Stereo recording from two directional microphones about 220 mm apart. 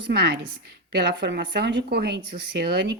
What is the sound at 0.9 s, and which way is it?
Speech, 50° right (ahead or behind).